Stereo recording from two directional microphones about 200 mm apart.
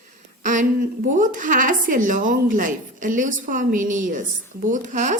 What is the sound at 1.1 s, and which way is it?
A woman's voice, 40° right (ahead or behind).